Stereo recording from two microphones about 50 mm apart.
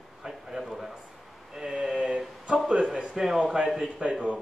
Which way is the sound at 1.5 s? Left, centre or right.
Centre.